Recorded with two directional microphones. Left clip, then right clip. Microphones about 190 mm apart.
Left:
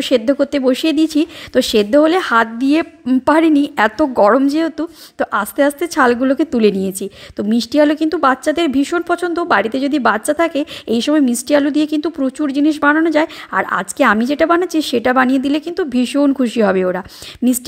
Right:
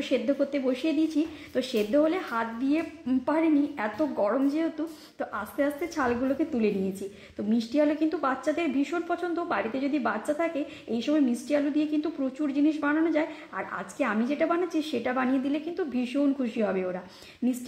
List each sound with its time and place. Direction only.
0.0 s speech: 50° left (ahead or behind)